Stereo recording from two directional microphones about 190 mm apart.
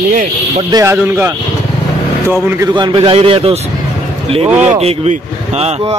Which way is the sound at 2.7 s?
25° right (ahead or behind).